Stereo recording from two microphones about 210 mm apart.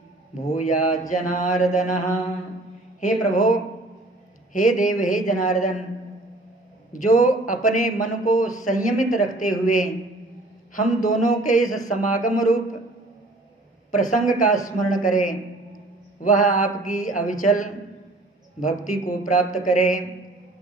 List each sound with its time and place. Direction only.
0.4 s a man's voice: 35° left (ahead or behind)
3.0 s a man's voice: 40° left (ahead or behind)
6.9 s a man's voice: 40° left (ahead or behind)
13.9 s a man's voice: 40° left (ahead or behind)